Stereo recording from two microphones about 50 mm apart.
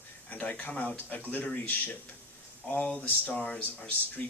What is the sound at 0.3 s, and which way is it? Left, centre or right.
Speech, left.